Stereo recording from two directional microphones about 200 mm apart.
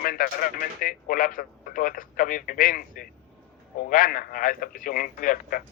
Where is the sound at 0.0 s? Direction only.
45° left (ahead or behind).